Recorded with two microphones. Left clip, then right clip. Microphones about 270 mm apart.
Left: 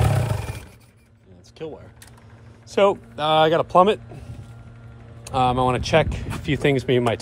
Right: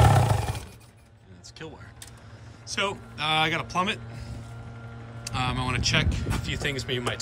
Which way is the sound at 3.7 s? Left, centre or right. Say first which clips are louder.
Left 11 dB; centre.